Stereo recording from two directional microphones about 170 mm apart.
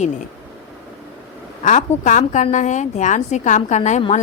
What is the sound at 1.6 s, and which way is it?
A woman's voice, 45° left (ahead or behind).